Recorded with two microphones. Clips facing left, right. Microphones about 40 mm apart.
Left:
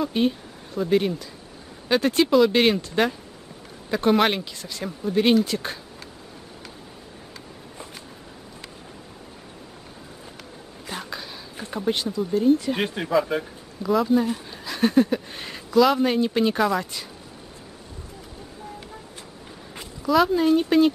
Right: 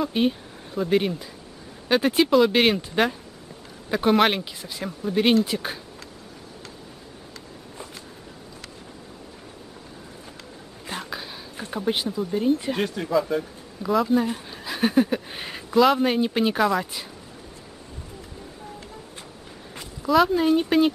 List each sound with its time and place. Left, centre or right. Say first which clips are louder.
0.0 s speech: even; centre
10.9 s a sound: right 1 dB; centre
11.6 s speech: even; centre
12.4 s speech: left 4 dB; right
12.8 s speech: left 1 dB; left
13.8 s speech: left 1 dB; centre
20.0 s speech: even; centre